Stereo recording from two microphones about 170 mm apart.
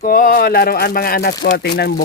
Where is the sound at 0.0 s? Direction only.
55° left (ahead or behind).